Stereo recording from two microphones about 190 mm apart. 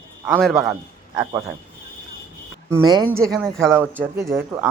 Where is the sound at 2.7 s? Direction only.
20° right (ahead or behind).